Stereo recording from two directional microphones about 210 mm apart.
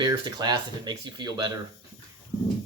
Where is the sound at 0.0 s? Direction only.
20° right (ahead or behind).